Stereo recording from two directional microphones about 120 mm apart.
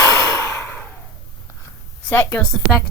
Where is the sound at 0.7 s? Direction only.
15° left (ahead or behind).